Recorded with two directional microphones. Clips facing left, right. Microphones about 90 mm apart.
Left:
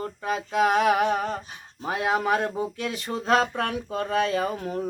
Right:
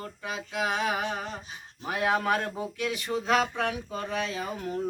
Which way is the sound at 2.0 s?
20° left (ahead or behind).